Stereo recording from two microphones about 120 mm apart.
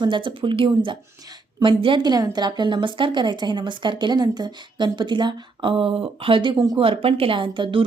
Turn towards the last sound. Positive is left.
turn(degrees=-45)  # may be behind; listen again after turning